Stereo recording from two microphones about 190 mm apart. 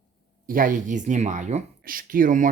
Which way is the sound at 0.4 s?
45° right (ahead or behind).